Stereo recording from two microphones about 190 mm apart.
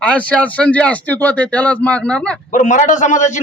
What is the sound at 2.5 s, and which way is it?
Speech, 40° left (ahead or behind).